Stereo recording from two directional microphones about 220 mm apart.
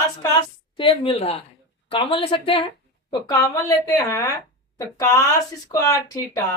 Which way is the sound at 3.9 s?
15° left (ahead or behind).